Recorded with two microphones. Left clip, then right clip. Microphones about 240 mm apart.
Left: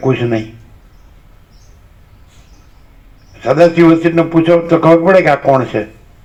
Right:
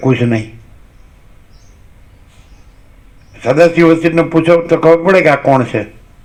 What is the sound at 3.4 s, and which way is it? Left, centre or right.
Speech, right.